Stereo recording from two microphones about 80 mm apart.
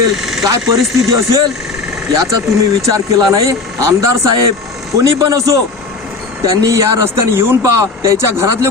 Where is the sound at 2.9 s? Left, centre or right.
Right.